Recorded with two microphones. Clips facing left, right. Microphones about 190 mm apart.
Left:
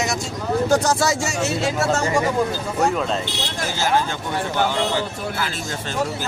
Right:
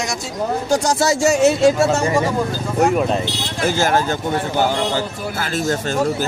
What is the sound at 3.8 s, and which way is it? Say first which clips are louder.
Speech: right 1 dB; 45° right (ahead or behind).